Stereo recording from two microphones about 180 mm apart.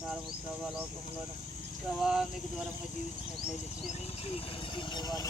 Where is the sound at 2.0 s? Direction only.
5° right (ahead or behind).